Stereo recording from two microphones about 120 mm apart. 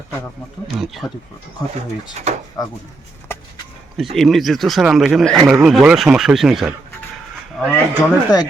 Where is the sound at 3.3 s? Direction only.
20° left (ahead or behind).